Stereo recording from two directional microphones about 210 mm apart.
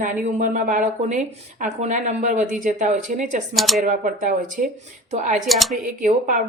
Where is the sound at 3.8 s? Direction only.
40° right (ahead or behind).